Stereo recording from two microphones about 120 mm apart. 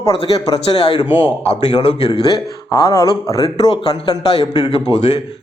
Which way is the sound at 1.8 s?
60° left (ahead or behind).